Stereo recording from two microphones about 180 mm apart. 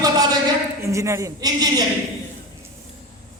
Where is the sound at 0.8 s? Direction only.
15° right (ahead or behind).